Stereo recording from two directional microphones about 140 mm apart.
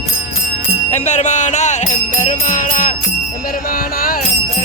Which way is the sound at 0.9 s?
55° left (ahead or behind).